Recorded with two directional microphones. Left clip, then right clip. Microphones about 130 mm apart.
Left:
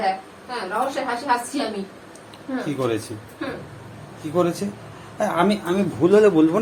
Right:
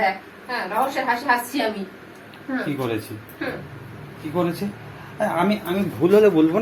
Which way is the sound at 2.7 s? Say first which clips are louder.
Left 6 dB; 20° left (ahead or behind).